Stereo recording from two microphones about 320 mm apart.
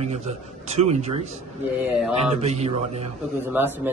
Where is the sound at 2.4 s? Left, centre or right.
Centre.